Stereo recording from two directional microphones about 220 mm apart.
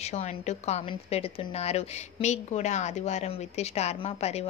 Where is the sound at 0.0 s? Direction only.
30° left (ahead or behind).